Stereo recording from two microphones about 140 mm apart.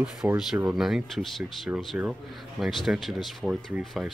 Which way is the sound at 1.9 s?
10° right (ahead or behind).